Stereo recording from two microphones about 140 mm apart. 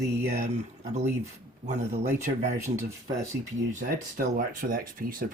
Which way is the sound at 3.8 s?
75° right (ahead or behind).